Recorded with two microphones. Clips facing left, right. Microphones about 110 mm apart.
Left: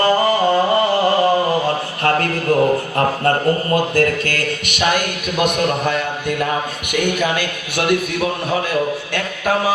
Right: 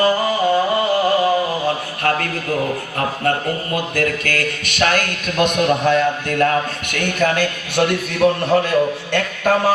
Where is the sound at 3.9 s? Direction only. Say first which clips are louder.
Left 3 dB; 35° left (ahead or behind).